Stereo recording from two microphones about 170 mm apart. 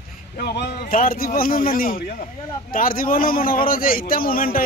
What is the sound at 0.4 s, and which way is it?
A man's voice, 70° left (ahead or behind).